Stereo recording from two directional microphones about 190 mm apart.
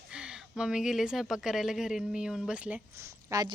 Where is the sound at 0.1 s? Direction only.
5° right (ahead or behind).